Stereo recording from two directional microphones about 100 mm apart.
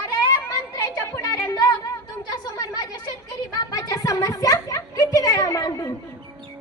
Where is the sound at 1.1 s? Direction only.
40° left (ahead or behind).